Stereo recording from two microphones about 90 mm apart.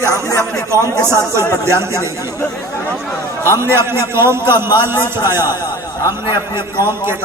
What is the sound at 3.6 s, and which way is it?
A man's voice, 30° right (ahead or behind).